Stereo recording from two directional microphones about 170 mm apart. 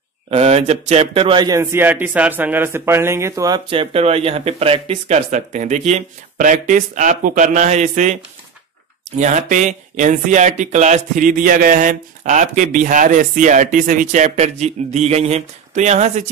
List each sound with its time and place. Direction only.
0.3 s speech: 35° right (ahead or behind)
9.2 s speech: 45° right (ahead or behind)